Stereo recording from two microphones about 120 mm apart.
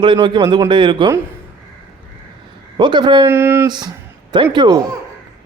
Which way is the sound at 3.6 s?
35° right (ahead or behind).